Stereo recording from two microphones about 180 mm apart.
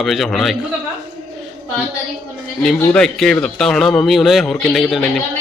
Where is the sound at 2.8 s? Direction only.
5° left (ahead or behind).